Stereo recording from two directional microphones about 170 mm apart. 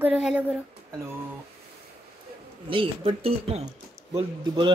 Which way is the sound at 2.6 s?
30° right (ahead or behind).